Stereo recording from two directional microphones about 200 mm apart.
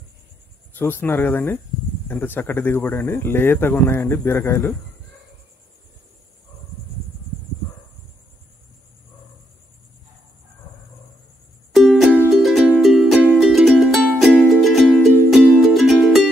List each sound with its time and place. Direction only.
0.7 s speech: 10° left (ahead or behind)
11.7 s music: centre (ahead or behind)